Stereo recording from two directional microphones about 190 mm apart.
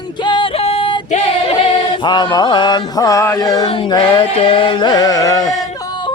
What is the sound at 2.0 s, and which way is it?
Music, 25° left (ahead or behind).